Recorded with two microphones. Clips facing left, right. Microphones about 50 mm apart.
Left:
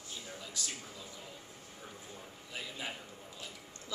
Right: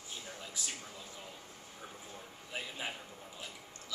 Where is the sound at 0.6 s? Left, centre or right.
Centre.